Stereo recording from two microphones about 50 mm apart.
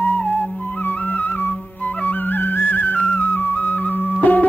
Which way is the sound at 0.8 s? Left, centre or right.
Left.